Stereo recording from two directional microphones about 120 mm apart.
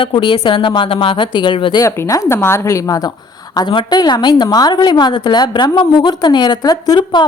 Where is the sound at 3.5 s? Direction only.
40° left (ahead or behind).